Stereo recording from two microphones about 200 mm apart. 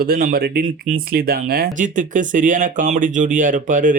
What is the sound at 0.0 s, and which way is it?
Speech, 45° right (ahead or behind).